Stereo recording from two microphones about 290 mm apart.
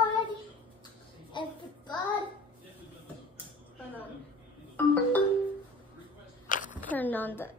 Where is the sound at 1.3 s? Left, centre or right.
Centre.